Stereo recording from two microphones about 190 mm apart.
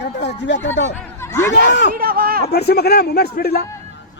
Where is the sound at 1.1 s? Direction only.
15° left (ahead or behind).